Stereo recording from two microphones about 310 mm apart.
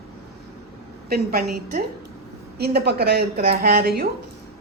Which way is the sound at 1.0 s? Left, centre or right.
Right.